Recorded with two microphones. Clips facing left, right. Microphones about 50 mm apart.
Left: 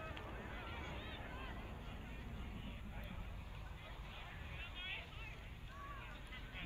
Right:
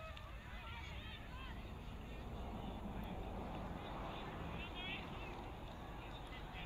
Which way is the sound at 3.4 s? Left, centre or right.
Right.